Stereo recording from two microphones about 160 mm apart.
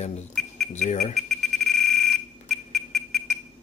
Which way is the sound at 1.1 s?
Centre (ahead or behind).